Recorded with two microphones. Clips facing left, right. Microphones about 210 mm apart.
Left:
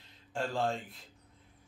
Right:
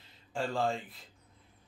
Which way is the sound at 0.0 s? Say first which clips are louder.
Right 1 dB; centre (ahead or behind).